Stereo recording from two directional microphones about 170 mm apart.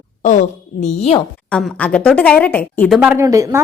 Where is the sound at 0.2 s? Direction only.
50° left (ahead or behind).